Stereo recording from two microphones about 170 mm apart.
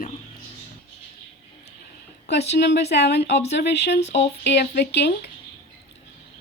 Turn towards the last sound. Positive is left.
turn(degrees=85)